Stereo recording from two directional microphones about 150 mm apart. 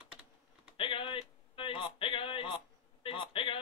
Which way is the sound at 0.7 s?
35° left (ahead or behind).